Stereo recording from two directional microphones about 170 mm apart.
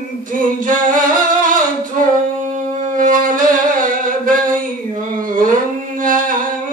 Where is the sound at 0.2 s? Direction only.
50° right (ahead or behind).